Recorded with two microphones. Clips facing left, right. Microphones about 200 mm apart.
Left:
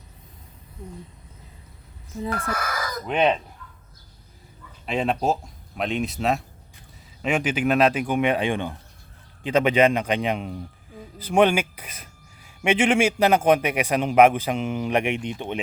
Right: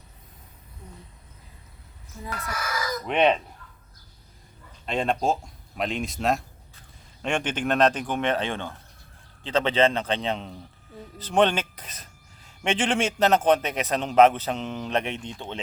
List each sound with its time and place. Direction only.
2.3 s chicken: 55° left (ahead or behind)
3.1 s speech: centre (ahead or behind)
4.9 s a man's voice: 5° left (ahead or behind)